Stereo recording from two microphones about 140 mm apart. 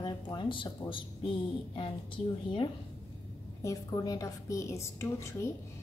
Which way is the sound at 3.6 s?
25° left (ahead or behind).